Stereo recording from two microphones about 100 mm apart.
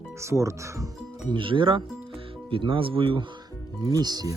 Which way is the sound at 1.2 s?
55° right (ahead or behind).